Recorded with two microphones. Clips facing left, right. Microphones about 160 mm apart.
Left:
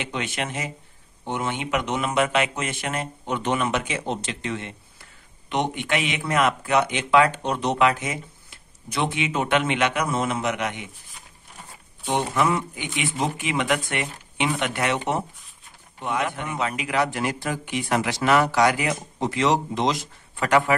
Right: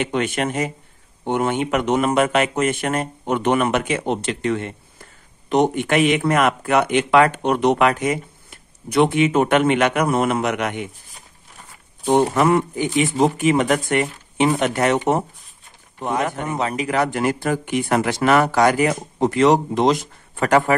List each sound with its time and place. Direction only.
0.0 s speech: 50° right (ahead or behind)
12.0 s speech: 45° right (ahead or behind)
12.8 s speech: 40° right (ahead or behind)